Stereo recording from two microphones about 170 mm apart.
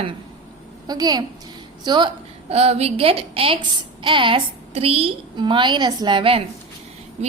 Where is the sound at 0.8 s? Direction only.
20° right (ahead or behind).